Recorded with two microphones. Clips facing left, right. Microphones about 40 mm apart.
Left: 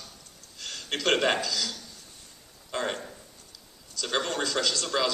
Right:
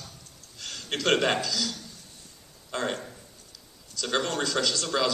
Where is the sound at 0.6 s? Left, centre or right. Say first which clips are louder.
Even; centre.